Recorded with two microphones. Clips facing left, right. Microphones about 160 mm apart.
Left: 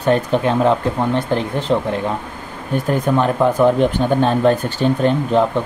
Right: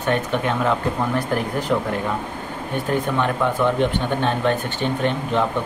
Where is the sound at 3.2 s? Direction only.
40° left (ahead or behind).